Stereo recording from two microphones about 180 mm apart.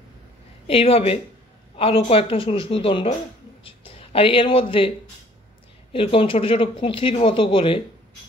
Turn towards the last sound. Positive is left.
turn(degrees=30)  # may be behind; listen again after turning